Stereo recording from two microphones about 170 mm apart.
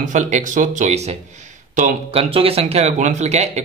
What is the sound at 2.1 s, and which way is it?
Speech, 35° right (ahead or behind).